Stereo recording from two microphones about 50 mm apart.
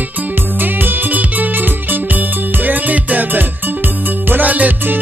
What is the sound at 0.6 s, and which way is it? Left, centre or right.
Music, right.